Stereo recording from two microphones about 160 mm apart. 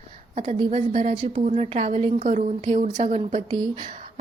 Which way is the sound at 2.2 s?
50° right (ahead or behind).